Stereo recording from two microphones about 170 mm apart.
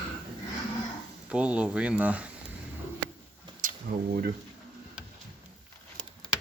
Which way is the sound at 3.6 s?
50° right (ahead or behind).